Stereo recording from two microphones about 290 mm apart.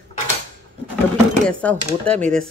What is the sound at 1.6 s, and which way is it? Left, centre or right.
Speech, centre.